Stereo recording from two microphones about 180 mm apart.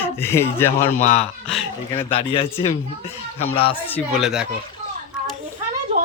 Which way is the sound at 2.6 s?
15° left (ahead or behind).